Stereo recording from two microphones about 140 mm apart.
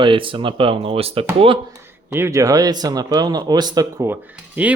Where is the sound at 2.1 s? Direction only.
20° right (ahead or behind).